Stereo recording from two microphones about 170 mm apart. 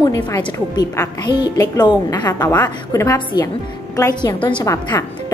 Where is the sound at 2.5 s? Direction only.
15° left (ahead or behind).